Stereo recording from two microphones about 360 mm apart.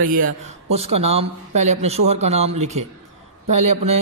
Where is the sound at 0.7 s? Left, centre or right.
Centre.